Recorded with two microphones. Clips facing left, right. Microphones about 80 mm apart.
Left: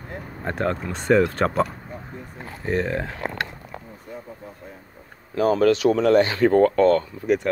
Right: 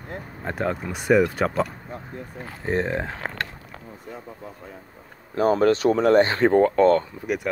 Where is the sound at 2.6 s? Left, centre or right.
Right.